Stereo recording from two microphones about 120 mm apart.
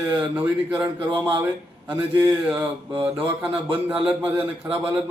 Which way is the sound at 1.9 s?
10° right (ahead or behind).